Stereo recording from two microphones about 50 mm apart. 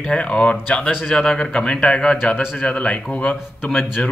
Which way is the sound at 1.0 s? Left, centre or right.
Centre.